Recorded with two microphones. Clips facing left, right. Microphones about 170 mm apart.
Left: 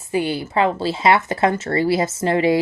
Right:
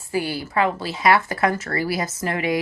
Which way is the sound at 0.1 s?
20° left (ahead or behind).